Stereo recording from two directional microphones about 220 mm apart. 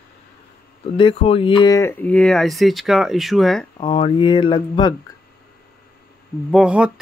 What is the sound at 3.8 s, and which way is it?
Speech, 25° left (ahead or behind).